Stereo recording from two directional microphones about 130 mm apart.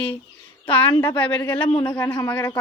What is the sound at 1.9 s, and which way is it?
Speech, 25° left (ahead or behind).